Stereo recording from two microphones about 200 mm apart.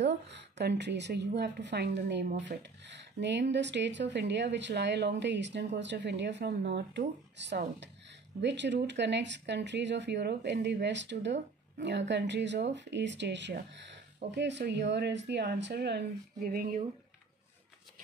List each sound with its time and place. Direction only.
0.0 s a woman's voice: 60° right (ahead or behind)